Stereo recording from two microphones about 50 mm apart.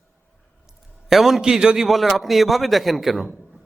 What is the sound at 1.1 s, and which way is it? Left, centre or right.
Speech, centre.